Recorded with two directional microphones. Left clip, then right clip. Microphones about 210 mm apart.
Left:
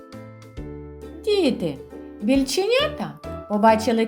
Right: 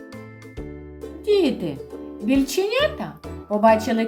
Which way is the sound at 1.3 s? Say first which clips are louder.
Right 1 dB; 35° left (ahead or behind).